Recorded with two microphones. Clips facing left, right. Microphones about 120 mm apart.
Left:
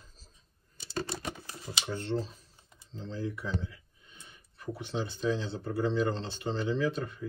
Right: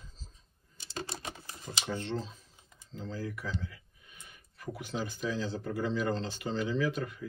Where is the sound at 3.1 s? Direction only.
25° left (ahead or behind).